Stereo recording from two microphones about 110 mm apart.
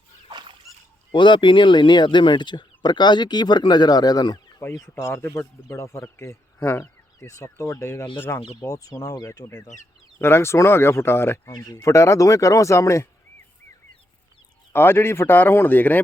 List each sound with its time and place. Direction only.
0.3 s a sound: 45° right (ahead or behind)
1.1 s speech: 45° left (ahead or behind)
4.6 s speech: 25° left (ahead or behind)
10.2 s speech: 20° left (ahead or behind)
11.5 s speech: 35° left (ahead or behind)
14.7 s speech: 20° left (ahead or behind)